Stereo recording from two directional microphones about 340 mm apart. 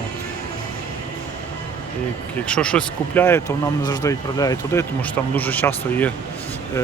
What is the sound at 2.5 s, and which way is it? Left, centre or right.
Speech, centre.